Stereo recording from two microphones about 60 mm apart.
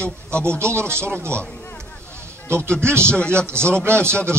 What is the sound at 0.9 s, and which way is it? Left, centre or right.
Speech, right.